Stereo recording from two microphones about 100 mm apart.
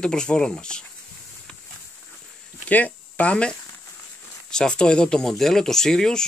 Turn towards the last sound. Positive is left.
turn(degrees=5)  # may be behind; listen again after turning